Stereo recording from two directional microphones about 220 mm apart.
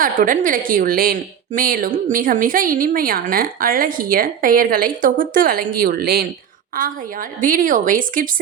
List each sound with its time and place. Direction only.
0.0 s a woman's voice: 40° right (ahead or behind)
7.4 s a woman's voice: 40° right (ahead or behind)